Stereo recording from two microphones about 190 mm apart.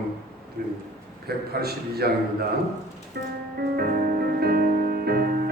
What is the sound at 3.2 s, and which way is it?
Speech, 55° right (ahead or behind).